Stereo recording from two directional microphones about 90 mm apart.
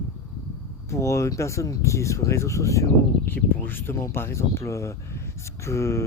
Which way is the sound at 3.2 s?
25° left (ahead or behind).